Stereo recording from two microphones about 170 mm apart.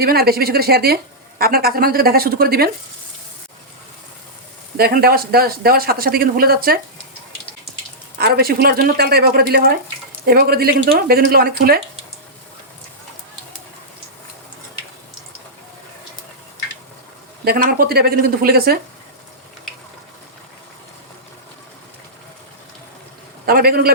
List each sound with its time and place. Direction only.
0.0 s speech: 65° right (ahead or behind)
4.8 s speech: 65° right (ahead or behind)
8.2 s speech: 65° right (ahead or behind)
17.4 s speech: 65° right (ahead or behind)
23.5 s speech: 60° right (ahead or behind)